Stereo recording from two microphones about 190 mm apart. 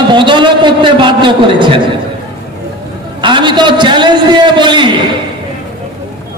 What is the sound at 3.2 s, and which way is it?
A man's voice, 25° right (ahead or behind).